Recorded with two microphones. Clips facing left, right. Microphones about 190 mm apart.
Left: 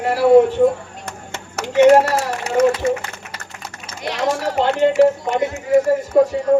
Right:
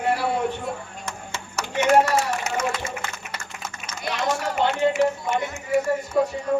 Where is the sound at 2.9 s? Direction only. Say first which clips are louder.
Left 14 dB; 60° left (ahead or behind).